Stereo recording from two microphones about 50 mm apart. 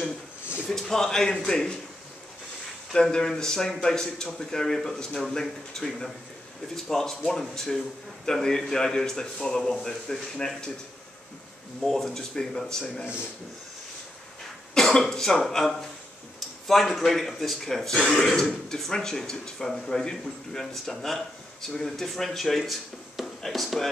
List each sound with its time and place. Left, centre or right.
0.7 s speech: centre
2.9 s speech: centre
11.8 s speech: centre
14.7 s speech: centre
17.9 s speech: centre
18.2 s speech: centre